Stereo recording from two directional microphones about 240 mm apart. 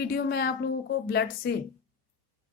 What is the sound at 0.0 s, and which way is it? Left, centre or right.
Speech, left.